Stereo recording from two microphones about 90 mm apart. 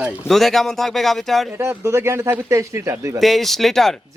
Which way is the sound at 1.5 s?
30° right (ahead or behind).